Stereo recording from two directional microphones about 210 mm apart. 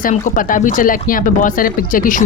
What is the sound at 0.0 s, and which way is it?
Speech, 40° left (ahead or behind).